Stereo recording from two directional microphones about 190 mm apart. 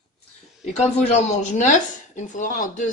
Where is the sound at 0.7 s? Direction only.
35° left (ahead or behind).